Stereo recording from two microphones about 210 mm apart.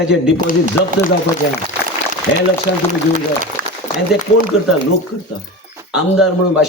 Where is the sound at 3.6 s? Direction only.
45° right (ahead or behind).